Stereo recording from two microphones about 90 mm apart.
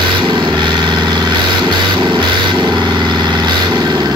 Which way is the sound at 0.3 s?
60° right (ahead or behind).